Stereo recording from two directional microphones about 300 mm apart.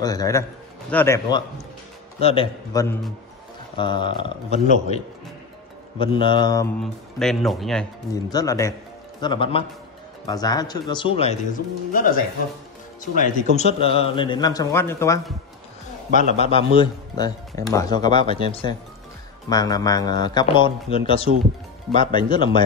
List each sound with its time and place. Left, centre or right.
0.0 s a man's voice: centre
5.9 s a man's voice: centre
6.8 s speech: centre
8.1 s a man's voice: centre
16.1 s a man's voice: left